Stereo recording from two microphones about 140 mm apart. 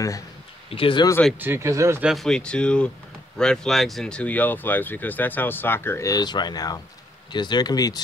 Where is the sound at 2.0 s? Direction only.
Centre (ahead or behind).